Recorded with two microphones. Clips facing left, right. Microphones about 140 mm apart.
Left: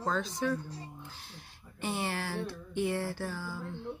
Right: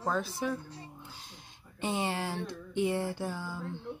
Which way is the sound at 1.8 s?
20° right (ahead or behind).